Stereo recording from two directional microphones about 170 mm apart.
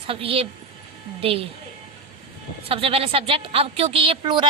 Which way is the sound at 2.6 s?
35° right (ahead or behind).